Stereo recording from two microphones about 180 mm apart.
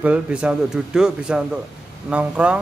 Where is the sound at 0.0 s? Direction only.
5° right (ahead or behind).